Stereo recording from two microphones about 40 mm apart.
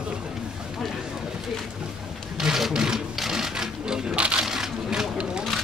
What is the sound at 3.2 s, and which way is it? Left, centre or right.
Sewing machine, centre.